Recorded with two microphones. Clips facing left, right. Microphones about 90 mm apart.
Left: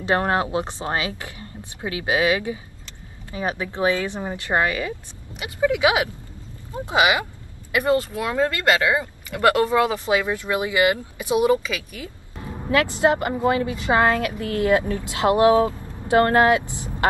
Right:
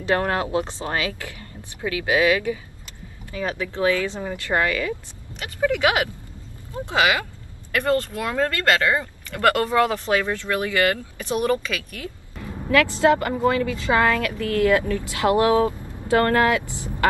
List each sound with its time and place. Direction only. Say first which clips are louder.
0.0 s a woman's voice: left 1 dB; 25° left (ahead or behind)
5.3 s speech: left 1 dB; 10° left (ahead or behind)
6.7 s speech: left 1 dB; 15° left (ahead or behind)
12.4 s a woman's voice: right 1 dB; 20° left (ahead or behind)